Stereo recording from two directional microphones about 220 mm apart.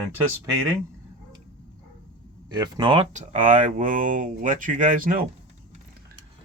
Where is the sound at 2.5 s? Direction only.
20° right (ahead or behind); by 5.1 s 35° right (ahead or behind).